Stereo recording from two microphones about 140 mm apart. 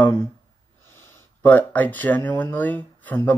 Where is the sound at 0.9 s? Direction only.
15° left (ahead or behind).